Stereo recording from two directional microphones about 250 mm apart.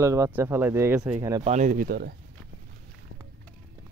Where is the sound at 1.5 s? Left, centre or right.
Right.